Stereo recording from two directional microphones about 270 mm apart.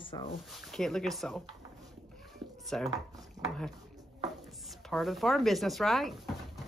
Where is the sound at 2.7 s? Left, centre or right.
Centre.